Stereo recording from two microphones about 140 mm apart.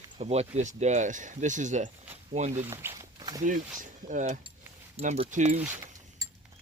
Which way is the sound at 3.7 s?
60° right (ahead or behind).